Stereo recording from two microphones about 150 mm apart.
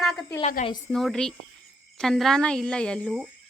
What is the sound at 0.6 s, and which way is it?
Speech, 55° left (ahead or behind).